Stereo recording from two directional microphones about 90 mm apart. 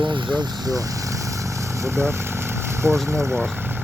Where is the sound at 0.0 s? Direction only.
60° right (ahead or behind).